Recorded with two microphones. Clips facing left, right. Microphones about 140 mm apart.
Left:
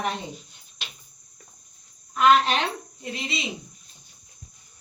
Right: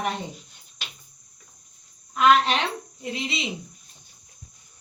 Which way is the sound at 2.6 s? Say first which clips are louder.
Right 1 dB; 25° right (ahead or behind).